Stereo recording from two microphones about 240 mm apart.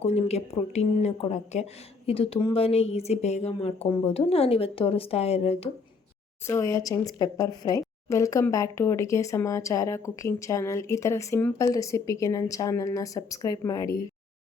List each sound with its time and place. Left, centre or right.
0.0 s speech: left
6.5 s speech: centre